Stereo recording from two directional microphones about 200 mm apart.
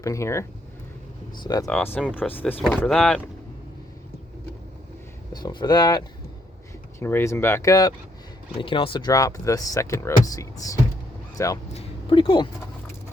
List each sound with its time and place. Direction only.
0.0 s speech: 15° left (ahead or behind)
1.6 s speech: 5° left (ahead or behind)
5.3 s speech: 20° left (ahead or behind)
11.7 s speech: 25° left (ahead or behind)